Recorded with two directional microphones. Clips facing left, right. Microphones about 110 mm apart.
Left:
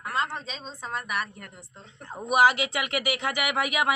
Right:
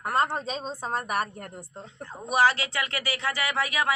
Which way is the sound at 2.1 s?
15° left (ahead or behind).